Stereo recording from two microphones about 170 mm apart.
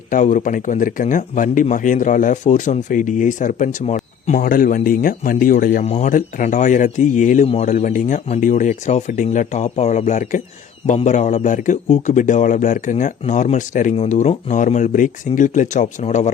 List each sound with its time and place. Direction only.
0.1 s speech: 50° left (ahead or behind)
5.8 s speech: 45° left (ahead or behind)